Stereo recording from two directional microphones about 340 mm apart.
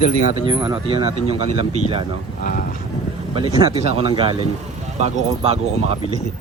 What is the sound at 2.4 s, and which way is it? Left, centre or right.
Speech, left.